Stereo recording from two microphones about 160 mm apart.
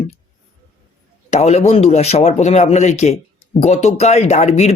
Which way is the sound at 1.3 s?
45° left (ahead or behind).